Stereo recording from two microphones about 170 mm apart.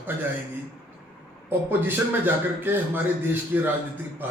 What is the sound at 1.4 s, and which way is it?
A man's voice, 10° right (ahead or behind).